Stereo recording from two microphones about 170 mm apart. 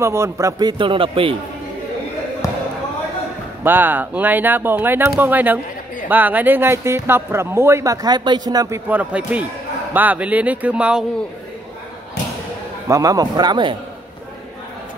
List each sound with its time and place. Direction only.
0.0 s a man's voice: 15° right (ahead or behind); by 1.3 s 30° right (ahead or behind)
3.6 s speech: 10° right (ahead or behind)
12.8 s a man's voice: 20° right (ahead or behind)